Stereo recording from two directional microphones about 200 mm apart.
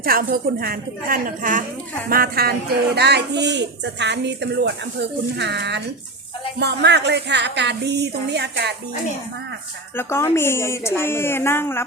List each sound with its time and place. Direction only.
0.0 s a woman's voice: 45° right (ahead or behind)
10.0 s a woman's voice: 10° left (ahead or behind)